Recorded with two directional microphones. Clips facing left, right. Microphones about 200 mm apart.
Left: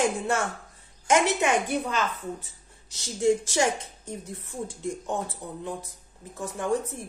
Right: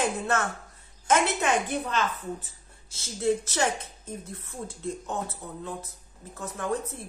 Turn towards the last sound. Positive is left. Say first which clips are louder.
# left 3 dB
turn(degrees=15)  # may be behind; listen again after turning